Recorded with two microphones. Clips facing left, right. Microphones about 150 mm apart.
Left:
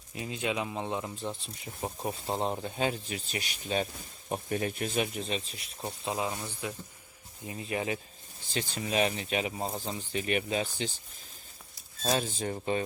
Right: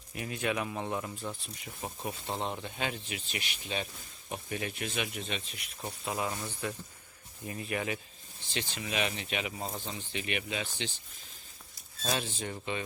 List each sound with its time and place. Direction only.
0.1 s speech: 20° left (ahead or behind)
6.1 s speech: 15° left (ahead or behind)
8.4 s speech: 40° left (ahead or behind)
12.0 s speech: 40° left (ahead or behind)